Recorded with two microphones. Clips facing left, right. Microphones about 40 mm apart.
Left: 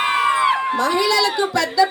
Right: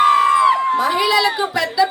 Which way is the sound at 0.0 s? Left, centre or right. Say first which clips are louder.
Right 5 dB; left.